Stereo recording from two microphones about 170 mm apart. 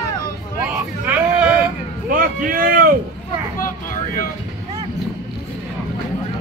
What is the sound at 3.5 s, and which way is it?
Vehicle, 55° left (ahead or behind).